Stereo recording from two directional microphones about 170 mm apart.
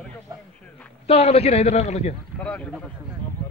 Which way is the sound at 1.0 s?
35° left (ahead or behind).